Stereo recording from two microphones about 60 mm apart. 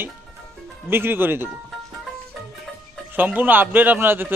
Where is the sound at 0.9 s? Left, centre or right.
Right.